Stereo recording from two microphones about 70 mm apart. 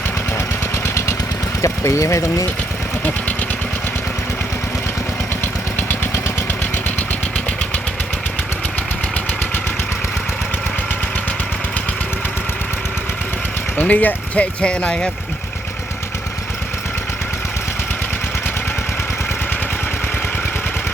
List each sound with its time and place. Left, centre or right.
1.6 s speech: left
3.0 s speech: left
5.7 s vehicle: left
13.7 s speech: left